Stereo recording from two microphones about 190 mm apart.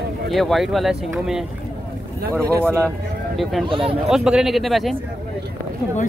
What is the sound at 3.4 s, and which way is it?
Speech, centre (ahead or behind).